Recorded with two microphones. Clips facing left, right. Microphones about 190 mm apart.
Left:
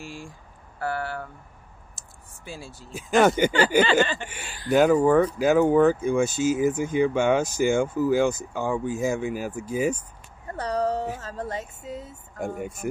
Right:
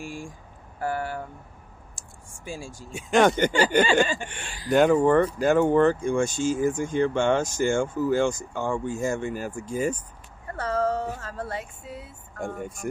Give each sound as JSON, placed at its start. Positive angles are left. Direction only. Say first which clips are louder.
{"t": 0.0, "sound": "speech", "louder": "right 3 dB", "side_deg": -15}
{"t": 2.4, "sound": "speech", "louder": "right 3 dB", "side_deg": -15}
{"t": 2.9, "sound": "speech", "louder": "even", "side_deg": 0}
{"t": 4.0, "sound": "speech", "louder": "even", "side_deg": -10}
{"t": 4.3, "sound": "speech", "louder": "left 1 dB", "side_deg": 5}
{"t": 10.5, "sound": "a woman's voice", "louder": "even", "side_deg": 15}
{"t": 11.8, "sound": "a sound", "louder": "left 4 dB", "side_deg": 40}
{"t": 12.4, "sound": "speech", "louder": "left 2 dB", "side_deg": 5}